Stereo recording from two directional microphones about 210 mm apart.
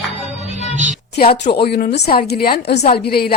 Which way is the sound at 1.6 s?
50° left (ahead or behind).